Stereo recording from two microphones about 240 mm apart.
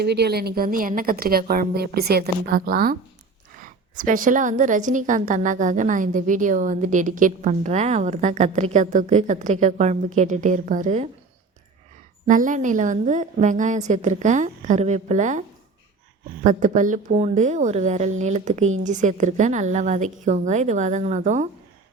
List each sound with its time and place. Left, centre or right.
0.0 s a woman's voice: right
12.3 s a woman's voice: right